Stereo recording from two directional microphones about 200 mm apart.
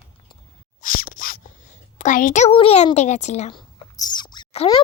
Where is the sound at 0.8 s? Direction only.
45° left (ahead or behind).